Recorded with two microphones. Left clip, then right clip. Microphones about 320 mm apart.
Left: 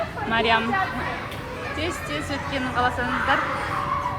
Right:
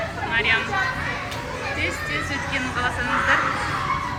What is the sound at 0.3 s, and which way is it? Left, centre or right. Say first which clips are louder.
Speech: even; centre.